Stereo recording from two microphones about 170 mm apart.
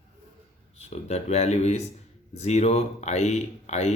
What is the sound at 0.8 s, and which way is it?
A man's voice, 40° left (ahead or behind).